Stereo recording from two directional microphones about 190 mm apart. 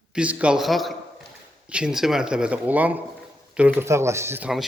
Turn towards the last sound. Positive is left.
turn(degrees=-5)  # may be behind; listen again after turning